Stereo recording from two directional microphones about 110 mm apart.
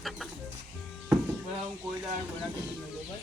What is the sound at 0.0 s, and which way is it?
Music, centre (ahead or behind).